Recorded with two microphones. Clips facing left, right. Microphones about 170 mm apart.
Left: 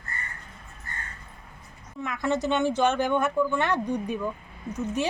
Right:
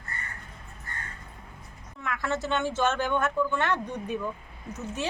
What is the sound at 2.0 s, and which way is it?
Speech, 20° left (ahead or behind).